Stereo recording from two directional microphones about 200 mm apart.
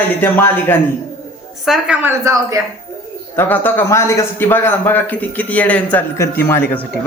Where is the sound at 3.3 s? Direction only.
10° left (ahead or behind).